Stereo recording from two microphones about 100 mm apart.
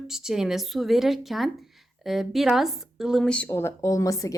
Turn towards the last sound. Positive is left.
turn(degrees=35)  # may be behind; listen again after turning